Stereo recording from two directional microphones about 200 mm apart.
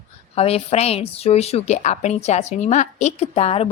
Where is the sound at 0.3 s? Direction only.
30° left (ahead or behind).